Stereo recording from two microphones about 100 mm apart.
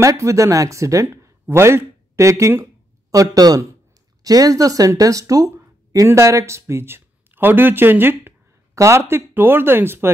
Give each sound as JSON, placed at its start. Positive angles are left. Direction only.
{"t": 0.0, "sound": "speech", "side_deg": -30}